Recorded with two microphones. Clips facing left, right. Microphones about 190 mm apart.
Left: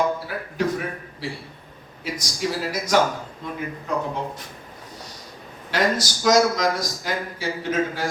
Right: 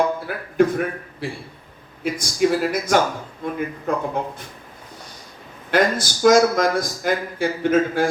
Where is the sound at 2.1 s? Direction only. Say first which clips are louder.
Right 8 dB; 55° right (ahead or behind).